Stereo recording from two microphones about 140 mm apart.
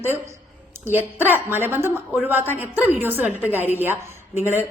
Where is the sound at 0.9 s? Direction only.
15° right (ahead or behind).